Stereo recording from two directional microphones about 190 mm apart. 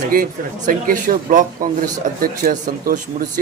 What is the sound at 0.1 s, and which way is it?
A man's voice, 45° right (ahead or behind).